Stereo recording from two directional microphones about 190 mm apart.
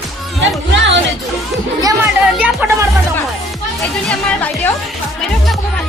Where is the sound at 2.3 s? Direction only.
5° right (ahead or behind).